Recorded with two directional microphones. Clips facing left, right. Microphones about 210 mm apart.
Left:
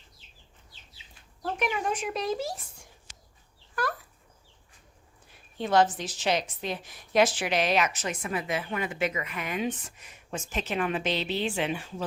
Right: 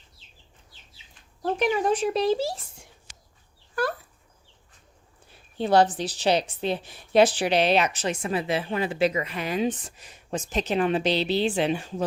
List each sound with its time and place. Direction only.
1.4 s speech: 35° right (ahead or behind)
5.5 s a woman's voice: 35° right (ahead or behind)